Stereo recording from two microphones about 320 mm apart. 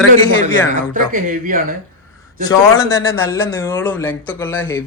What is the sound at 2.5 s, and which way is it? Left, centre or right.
A man's voice, centre.